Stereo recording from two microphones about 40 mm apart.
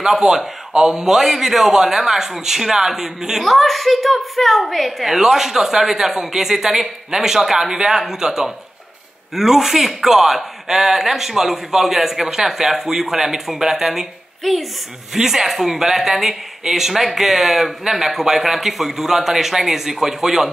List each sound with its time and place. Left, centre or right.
0.0 s a man's voice: centre